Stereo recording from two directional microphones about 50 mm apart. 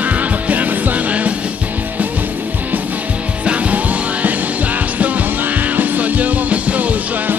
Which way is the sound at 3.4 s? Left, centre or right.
Right.